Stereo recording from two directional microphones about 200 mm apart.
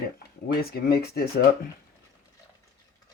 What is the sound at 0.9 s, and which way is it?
Speech, 50° left (ahead or behind).